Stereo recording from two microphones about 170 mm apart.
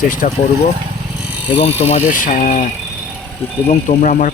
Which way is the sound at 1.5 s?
40° left (ahead or behind).